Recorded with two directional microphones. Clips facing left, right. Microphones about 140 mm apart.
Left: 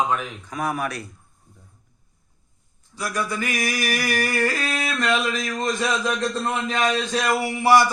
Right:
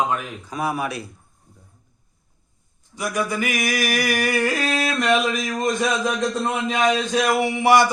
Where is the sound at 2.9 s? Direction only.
15° right (ahead or behind).